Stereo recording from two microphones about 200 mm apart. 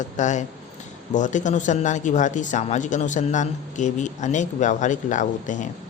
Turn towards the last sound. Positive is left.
turn(degrees=40)  # may be behind; listen again after turning